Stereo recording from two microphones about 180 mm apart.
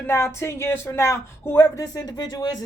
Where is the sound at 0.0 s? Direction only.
15° left (ahead or behind).